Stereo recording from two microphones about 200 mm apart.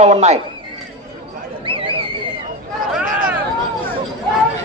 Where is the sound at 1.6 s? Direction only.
25° right (ahead or behind).